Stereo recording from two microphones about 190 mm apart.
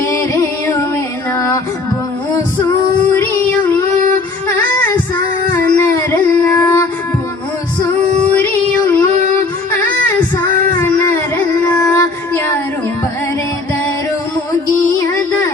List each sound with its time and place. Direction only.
0.0 s music: 15° left (ahead or behind)
3.1 s child singing: 10° left (ahead or behind)
4.4 s music: 15° left (ahead or behind)
5.5 s a sound: 15° left (ahead or behind)
7.8 s music: 10° left (ahead or behind)
8.9 s female singing: 10° left (ahead or behind)
10.2 s child singing: 10° left (ahead or behind)